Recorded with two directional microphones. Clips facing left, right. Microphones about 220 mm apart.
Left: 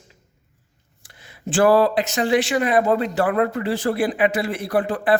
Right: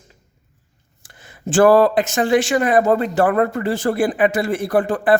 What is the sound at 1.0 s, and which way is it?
A man's voice, 50° right (ahead or behind).